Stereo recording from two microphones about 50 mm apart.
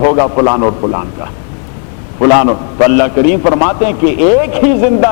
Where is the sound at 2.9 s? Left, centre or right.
Right.